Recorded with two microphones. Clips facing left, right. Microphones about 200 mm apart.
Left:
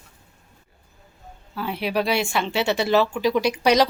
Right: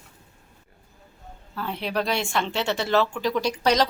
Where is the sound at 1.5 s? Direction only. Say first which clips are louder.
Left 3 dB; 10° left (ahead or behind).